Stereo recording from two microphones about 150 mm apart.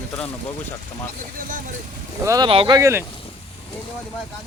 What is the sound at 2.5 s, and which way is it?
Speech, 35° right (ahead or behind).